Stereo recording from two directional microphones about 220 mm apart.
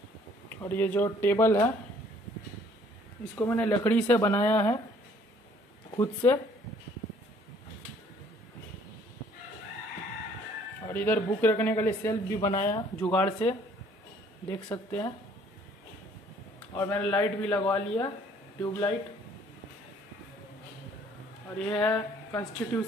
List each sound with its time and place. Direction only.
0.5 s a man's voice: 10° left (ahead or behind)
3.3 s a man's voice: 10° left (ahead or behind)
5.9 s a man's voice: 10° left (ahead or behind)
10.9 s a man's voice: 5° left (ahead or behind)
14.5 s a man's voice: 10° left (ahead or behind)
16.7 s a man's voice: 10° left (ahead or behind)
17.7 s a man's voice: 20° left (ahead or behind)
21.5 s a man's voice: 5° left (ahead or behind)